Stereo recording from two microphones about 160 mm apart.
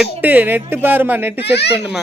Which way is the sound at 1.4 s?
90° left.